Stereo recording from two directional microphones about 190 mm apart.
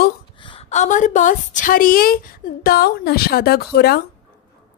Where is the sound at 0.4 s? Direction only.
30° left (ahead or behind); by 4.0 s 55° left (ahead or behind).